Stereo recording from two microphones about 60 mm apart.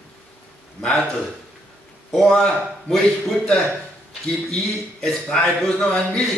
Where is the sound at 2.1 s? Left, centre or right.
Centre.